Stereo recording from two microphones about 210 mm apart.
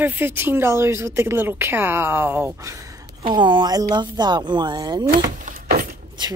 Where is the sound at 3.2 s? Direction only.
20° right (ahead or behind).